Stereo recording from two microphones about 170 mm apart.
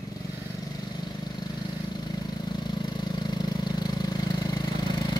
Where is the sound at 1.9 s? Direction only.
25° left (ahead or behind).